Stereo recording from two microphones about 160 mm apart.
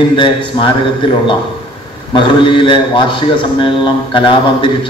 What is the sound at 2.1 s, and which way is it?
A man's voice, 30° left (ahead or behind).